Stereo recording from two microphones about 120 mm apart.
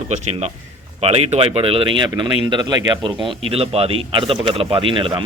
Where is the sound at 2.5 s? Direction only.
35° right (ahead or behind).